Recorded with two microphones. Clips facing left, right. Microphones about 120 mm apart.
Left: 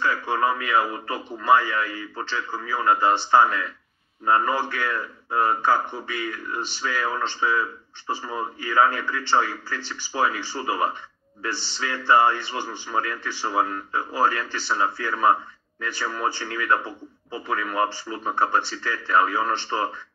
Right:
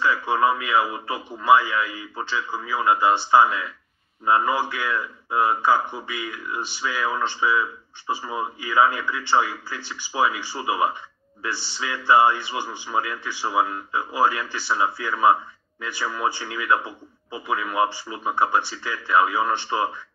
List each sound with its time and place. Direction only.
0.0 s speech: 20° right (ahead or behind)
12.1 s speech: 15° right (ahead or behind)